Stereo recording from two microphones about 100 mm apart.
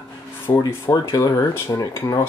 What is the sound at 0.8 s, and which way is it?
Speech, 30° left (ahead or behind).